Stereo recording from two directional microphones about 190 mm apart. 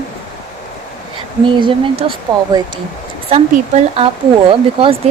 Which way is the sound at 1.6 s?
25° right (ahead or behind).